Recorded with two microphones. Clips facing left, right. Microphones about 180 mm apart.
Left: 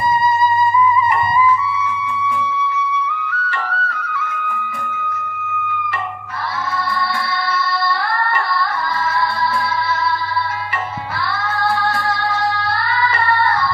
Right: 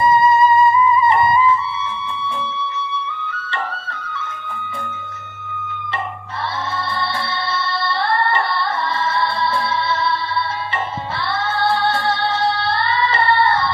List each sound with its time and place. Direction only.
0.0 s music: 25° right (ahead or behind)
11.5 s music: 25° right (ahead or behind)